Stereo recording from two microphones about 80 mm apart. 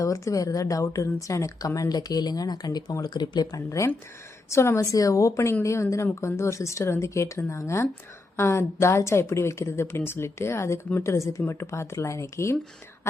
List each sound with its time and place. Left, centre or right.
0.0 s speech: left